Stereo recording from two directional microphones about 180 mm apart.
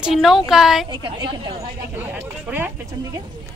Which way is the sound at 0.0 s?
Centre (ahead or behind).